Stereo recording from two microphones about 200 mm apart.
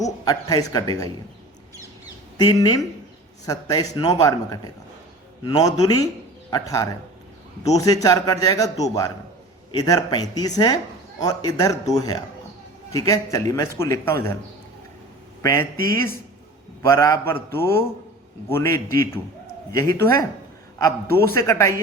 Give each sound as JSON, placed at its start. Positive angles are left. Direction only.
{"t": 0.0, "sound": "speech", "side_deg": 20}
{"t": 2.4, "sound": "a man's voice", "side_deg": 20}
{"t": 15.4, "sound": "speech", "side_deg": 15}
{"t": 16.8, "sound": "a man's voice", "side_deg": 15}